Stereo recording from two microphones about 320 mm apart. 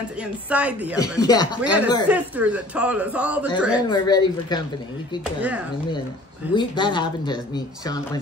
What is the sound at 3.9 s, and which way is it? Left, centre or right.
Speech, centre.